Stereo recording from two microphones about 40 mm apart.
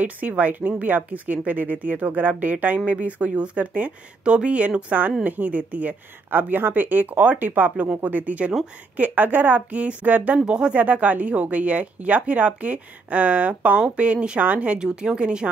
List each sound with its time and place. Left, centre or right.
0.0 s speech: right
4.2 s speech: right
6.3 s speech: right
7.7 s speech: right
10.5 s speech: right
10.8 s speech: right